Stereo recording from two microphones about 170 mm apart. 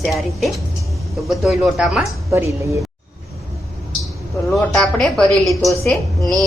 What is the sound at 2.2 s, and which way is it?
Speech, 15° right (ahead or behind).